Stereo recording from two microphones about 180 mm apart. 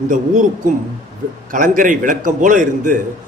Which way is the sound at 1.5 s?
50° right (ahead or behind).